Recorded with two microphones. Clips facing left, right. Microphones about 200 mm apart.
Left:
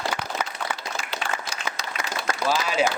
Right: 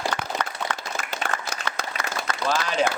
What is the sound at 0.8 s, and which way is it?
Applause, 55° right (ahead or behind).